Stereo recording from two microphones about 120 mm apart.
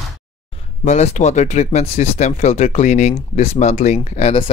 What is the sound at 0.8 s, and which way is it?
Speech, 75° left (ahead or behind).